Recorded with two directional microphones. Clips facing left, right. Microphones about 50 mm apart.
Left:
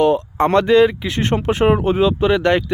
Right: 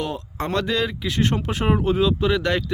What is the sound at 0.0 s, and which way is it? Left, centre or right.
Speech, left.